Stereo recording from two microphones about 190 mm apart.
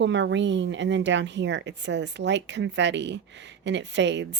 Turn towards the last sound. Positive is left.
turn(degrees=-65)  # may be behind; listen again after turning